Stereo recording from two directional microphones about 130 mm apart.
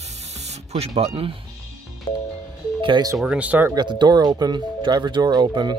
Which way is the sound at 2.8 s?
35° right (ahead or behind).